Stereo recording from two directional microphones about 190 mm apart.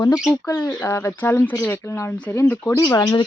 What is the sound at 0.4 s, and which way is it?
Speech, 20° left (ahead or behind).